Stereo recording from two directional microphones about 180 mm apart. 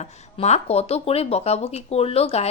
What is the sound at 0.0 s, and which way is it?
Speech, 40° left (ahead or behind).